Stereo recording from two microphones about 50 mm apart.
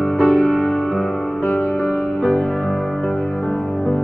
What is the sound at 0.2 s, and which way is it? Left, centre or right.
Music, centre.